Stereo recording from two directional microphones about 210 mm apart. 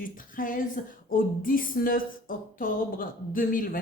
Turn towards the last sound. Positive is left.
turn(degrees=40)  # may be behind; listen again after turning